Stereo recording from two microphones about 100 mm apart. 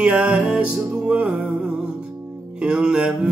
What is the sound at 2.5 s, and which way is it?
Music, 10° right (ahead or behind).